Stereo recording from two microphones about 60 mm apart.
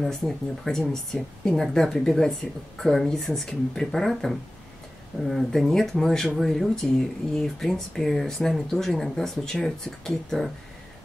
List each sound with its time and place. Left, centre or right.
0.0 s speech: centre